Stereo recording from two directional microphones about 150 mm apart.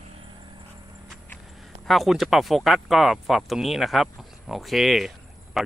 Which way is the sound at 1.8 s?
Centre (ahead or behind).